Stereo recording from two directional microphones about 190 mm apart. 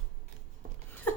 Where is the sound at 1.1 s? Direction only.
5° left (ahead or behind).